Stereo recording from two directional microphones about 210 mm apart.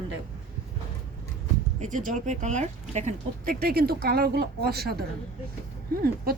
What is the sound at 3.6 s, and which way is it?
Speech, 45° right (ahead or behind).